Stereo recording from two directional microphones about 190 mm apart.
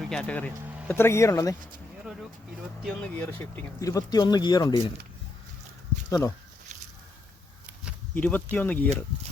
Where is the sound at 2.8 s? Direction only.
5° left (ahead or behind).